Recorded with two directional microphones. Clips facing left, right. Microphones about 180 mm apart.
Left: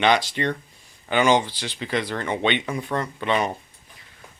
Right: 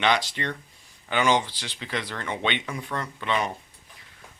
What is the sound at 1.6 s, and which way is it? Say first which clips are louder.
Speech: left 6 dB; 45° left (ahead or behind).